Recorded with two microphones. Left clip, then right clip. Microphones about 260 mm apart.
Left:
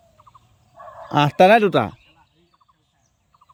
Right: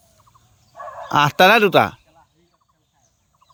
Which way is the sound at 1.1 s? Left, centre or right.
Centre.